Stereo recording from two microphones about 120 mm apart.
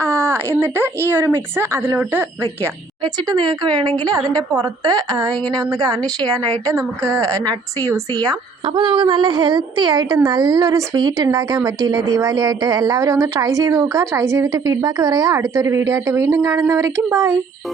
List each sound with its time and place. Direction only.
0.0 s a sound: 20° right (ahead or behind)
1.1 s a woman's voice: 20° right (ahead or behind)
3.0 s a woman's voice: 40° right (ahead or behind)